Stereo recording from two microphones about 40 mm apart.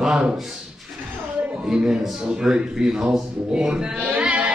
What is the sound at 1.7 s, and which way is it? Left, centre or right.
A man's voice, centre.